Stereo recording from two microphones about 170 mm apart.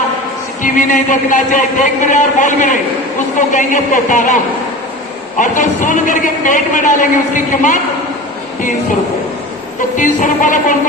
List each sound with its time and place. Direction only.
0.6 s speech: 50° left (ahead or behind)
5.4 s speech: 50° left (ahead or behind)
10.0 s speech: 50° left (ahead or behind)